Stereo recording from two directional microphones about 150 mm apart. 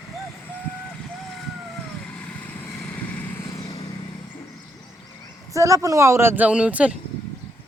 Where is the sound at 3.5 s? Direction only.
20° left (ahead or behind).